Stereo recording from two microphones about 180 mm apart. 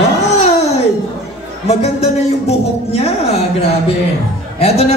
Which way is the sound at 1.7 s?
35° left (ahead or behind).